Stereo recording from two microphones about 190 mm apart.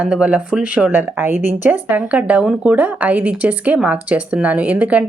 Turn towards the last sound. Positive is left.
turn(degrees=-5)  # may be behind; listen again after turning